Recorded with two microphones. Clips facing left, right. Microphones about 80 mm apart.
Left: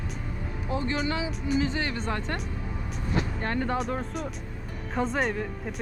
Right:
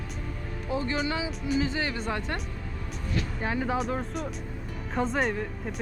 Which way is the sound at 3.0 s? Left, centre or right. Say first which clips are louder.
Left 3 dB; centre.